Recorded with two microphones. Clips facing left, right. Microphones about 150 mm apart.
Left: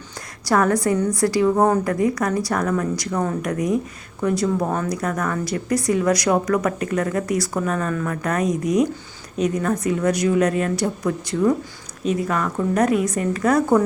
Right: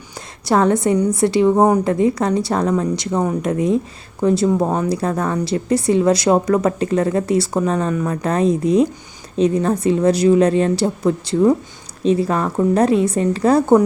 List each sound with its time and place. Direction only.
0.4 s a woman's voice: 25° right (ahead or behind)